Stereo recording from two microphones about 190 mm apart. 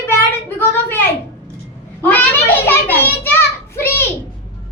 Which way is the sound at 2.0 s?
10° left (ahead or behind).